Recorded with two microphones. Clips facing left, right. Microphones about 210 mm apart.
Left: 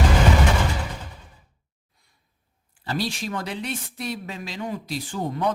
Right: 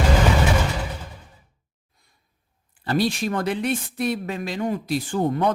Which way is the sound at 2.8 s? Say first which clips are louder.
Right 6 dB; 55° right (ahead or behind).